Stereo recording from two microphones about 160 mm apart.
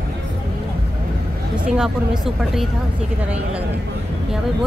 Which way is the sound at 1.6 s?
5° right (ahead or behind).